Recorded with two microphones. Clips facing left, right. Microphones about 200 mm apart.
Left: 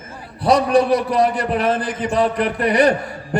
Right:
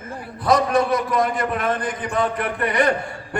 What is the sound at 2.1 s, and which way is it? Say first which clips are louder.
Speech: left 5 dB; 35° left (ahead or behind).